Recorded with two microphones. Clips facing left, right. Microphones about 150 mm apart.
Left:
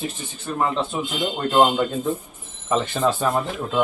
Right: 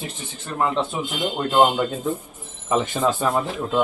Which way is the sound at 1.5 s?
5° right (ahead or behind).